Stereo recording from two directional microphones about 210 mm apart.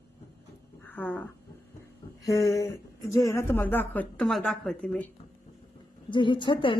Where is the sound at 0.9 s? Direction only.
10° left (ahead or behind).